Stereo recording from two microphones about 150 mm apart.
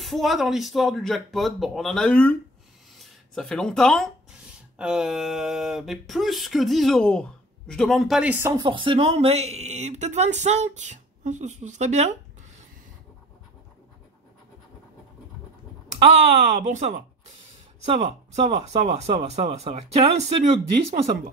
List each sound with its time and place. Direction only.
0.0 s speech: centre (ahead or behind)
8.5 s speech: 35° right (ahead or behind); by 12.1 s 50° right (ahead or behind)
15.9 s speech: 50° right (ahead or behind)